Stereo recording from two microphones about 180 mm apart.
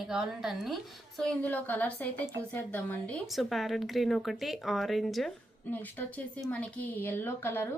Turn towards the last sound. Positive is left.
turn(degrees=10)  # may be behind; listen again after turning